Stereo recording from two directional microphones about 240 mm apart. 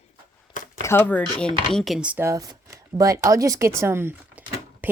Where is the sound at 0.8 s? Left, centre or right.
Centre.